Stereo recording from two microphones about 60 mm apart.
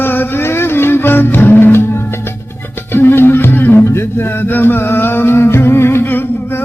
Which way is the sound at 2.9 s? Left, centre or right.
Left.